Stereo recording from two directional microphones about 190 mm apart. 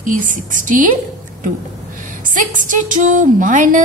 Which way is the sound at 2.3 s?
45° right (ahead or behind).